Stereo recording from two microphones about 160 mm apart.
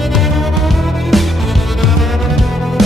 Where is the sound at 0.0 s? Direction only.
Centre (ahead or behind).